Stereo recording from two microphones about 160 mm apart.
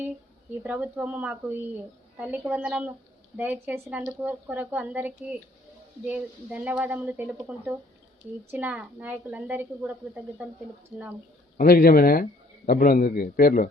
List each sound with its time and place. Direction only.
0.6 s a woman's voice: 10° right (ahead or behind)
11.5 s a man's voice: 60° left (ahead or behind)